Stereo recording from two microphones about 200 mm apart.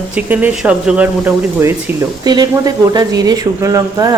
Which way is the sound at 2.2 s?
20° right (ahead or behind).